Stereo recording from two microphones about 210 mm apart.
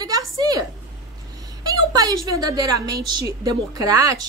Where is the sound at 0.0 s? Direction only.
20° right (ahead or behind).